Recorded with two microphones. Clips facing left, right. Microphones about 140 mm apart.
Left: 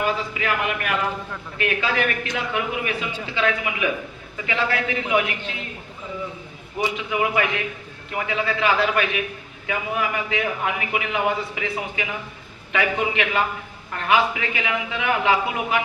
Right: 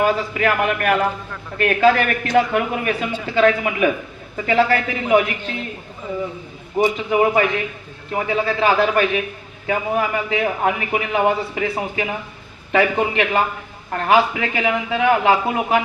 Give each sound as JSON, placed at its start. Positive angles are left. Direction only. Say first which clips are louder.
{"t": 0.0, "sound": "speech", "louder": "right 6 dB", "side_deg": -45}
{"t": 6.7, "sound": "a man's voice", "louder": "right 7 dB", "side_deg": -40}